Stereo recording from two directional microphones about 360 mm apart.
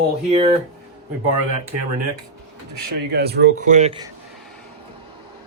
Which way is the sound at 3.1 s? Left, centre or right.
Right.